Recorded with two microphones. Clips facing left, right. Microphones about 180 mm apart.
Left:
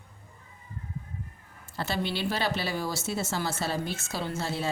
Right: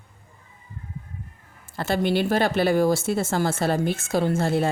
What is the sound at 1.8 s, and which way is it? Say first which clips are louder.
Speech: right 8 dB; 50° right (ahead or behind).